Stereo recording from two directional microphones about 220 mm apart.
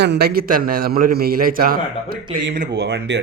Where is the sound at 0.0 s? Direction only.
50° right (ahead or behind).